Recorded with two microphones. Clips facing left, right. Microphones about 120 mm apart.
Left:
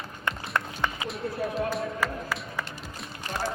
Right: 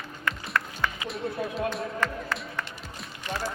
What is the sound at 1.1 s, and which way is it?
Run, centre (ahead or behind).